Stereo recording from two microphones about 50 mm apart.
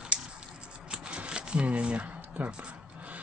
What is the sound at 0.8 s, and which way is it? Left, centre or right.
Shuffling cards, right.